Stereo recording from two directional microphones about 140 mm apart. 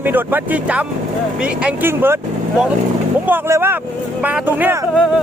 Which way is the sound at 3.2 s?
15° right (ahead or behind).